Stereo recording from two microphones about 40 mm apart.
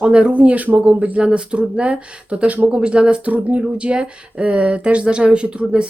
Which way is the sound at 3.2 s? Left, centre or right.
Right.